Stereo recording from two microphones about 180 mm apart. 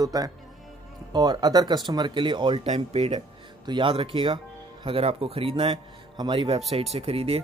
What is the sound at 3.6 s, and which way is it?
Speech, 25° right (ahead or behind).